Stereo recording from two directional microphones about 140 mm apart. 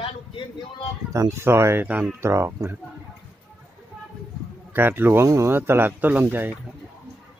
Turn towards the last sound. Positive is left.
turn(degrees=-15)  # may be behind; listen again after turning